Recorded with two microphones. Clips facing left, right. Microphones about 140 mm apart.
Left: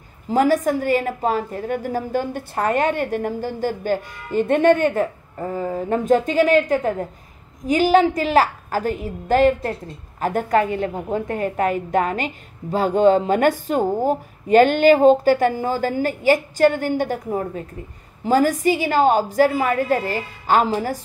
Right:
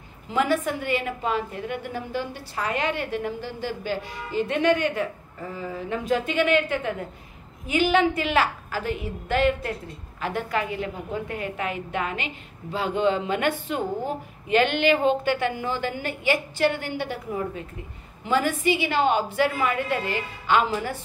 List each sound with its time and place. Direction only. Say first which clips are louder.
0.3 s a woman's voice: left 6 dB; 40° left (ahead or behind)